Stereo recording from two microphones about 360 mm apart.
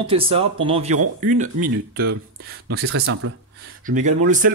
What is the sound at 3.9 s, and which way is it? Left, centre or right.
Speech, centre.